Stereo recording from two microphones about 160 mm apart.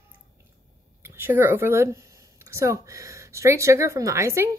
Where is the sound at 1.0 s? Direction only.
15° right (ahead or behind).